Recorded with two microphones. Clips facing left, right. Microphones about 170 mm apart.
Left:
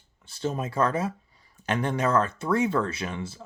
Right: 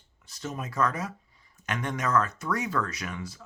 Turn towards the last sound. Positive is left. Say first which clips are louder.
# left 4 dB
turn(degrees=30)  # may be behind; listen again after turning